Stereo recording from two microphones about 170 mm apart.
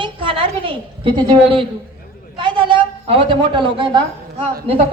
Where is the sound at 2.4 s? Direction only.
30° right (ahead or behind).